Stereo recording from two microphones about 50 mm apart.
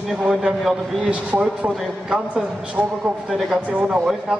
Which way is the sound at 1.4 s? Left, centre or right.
Centre.